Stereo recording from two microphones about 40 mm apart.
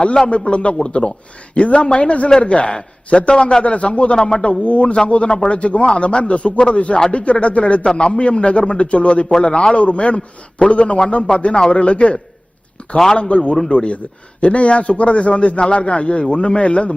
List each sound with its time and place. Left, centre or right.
0.3 s a man's voice: left
4.6 s a man's voice: left